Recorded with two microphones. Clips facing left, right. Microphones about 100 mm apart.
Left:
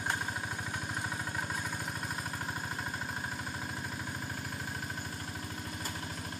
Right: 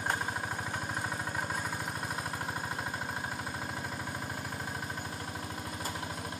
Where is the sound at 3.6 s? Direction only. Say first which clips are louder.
Right 2 dB; 40° right (ahead or behind).